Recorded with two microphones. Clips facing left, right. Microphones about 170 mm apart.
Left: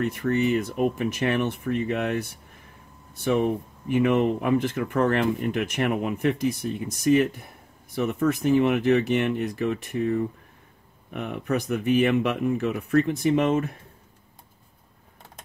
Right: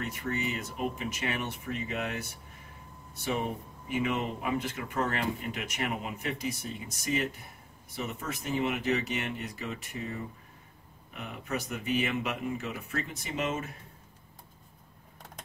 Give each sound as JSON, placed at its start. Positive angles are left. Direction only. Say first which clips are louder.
{"t": 0.0, "sound": "speech", "louder": "left 10 dB", "side_deg": 55}
{"t": 3.3, "sound": "speech", "louder": "left 9 dB", "side_deg": 55}
{"t": 11.1, "sound": "speech", "louder": "left 9 dB", "side_deg": 60}